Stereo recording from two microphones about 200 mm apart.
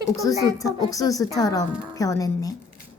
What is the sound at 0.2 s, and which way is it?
A woman's voice, 15° left (ahead or behind).